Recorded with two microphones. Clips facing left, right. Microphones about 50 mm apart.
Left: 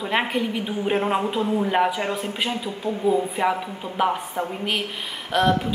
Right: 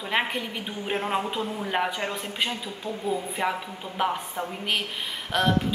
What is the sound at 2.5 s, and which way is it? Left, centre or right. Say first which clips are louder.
Speech: left 6 dB; centre.